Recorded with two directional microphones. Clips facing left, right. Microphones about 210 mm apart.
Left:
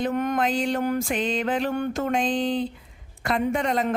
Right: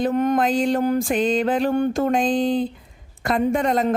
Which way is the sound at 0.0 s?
35° right (ahead or behind).